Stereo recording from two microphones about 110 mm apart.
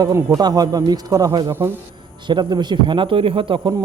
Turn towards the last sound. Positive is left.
turn(degrees=-45)  # may be behind; listen again after turning